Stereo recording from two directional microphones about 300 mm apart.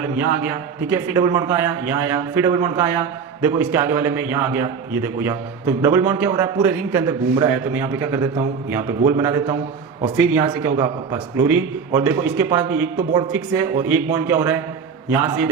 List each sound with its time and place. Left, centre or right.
0.4 s a man's voice: centre